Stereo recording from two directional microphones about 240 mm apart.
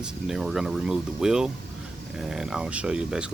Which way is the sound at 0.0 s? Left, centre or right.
Centre.